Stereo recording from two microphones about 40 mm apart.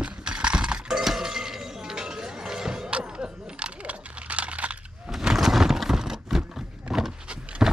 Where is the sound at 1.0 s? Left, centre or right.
Centre; by 4.8 s right.